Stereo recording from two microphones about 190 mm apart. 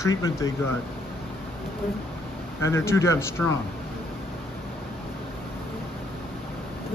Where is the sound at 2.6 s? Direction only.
15° left (ahead or behind).